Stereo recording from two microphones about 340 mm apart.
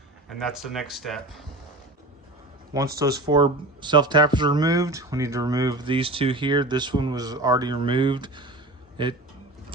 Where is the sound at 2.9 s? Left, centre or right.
Centre.